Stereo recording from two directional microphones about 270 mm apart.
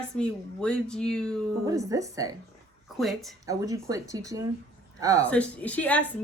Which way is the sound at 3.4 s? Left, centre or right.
Centre.